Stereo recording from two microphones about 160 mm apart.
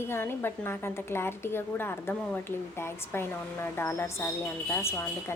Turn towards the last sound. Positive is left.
turn(degrees=15)  # may be behind; listen again after turning